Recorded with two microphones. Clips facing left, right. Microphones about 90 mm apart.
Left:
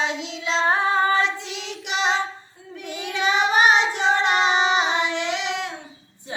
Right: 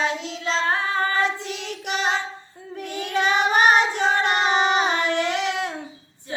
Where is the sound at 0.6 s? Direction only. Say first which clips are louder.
Left 6 dB; 20° left (ahead or behind).